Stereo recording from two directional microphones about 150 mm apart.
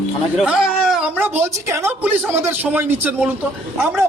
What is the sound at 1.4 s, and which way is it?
A man's voice, 15° right (ahead or behind).